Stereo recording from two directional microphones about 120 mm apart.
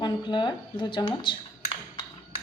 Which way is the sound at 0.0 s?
40° left (ahead or behind).